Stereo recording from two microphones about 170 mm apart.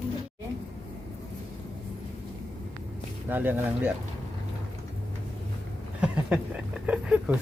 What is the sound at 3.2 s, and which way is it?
Speech, 10° right (ahead or behind).